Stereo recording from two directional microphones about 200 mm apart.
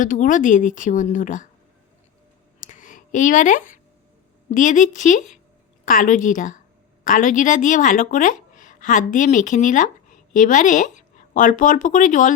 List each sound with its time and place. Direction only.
0.0 s speech: 40° left (ahead or behind)
2.6 s a sound: 40° left (ahead or behind)
4.5 s speech: 40° left (ahead or behind)